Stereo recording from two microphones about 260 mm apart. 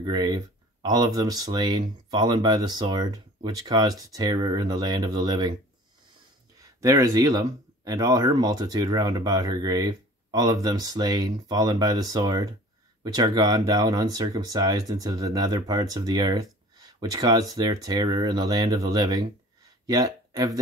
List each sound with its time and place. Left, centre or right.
0.0 s speech: centre
6.6 s speech: centre